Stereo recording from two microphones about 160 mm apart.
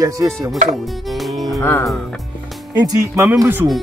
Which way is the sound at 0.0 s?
20° right (ahead or behind).